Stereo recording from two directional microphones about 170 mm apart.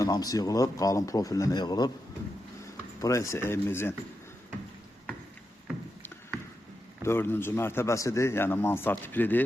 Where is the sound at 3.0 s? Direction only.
20° left (ahead or behind).